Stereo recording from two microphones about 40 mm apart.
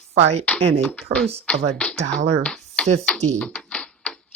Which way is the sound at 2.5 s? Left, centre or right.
Left.